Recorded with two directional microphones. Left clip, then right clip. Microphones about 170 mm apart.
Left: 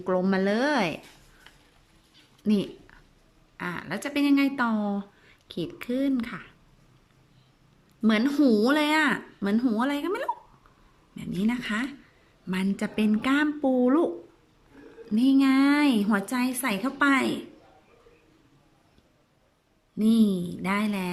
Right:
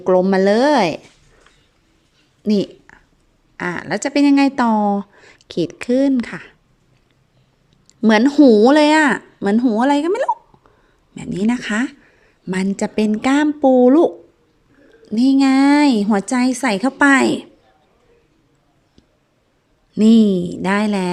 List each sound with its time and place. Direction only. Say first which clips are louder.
0.0 s a woman's voice: right 12 dB; 25° right (ahead or behind)
2.5 s a woman's voice: right 9 dB; 30° right (ahead or behind)
7.9 s a woman's voice: right 11 dB; 35° right (ahead or behind)
9.6 s a woman's voice: right 11 dB; 25° right (ahead or behind)
15.1 s a woman's voice: right 8 dB; 30° right (ahead or behind)
20.0 s a woman's voice: right 11 dB; 45° right (ahead or behind)